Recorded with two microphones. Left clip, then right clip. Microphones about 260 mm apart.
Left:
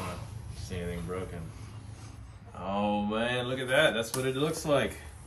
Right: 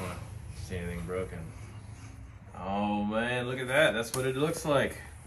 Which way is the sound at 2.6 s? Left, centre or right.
Centre.